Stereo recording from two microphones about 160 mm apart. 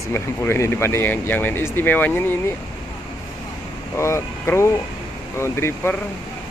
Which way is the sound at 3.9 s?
15° left (ahead or behind).